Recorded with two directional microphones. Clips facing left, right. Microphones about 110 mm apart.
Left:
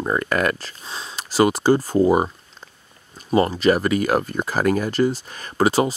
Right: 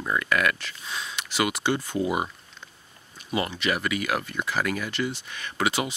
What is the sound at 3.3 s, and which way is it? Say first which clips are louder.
Speech: left 10 dB; 40° left (ahead or behind).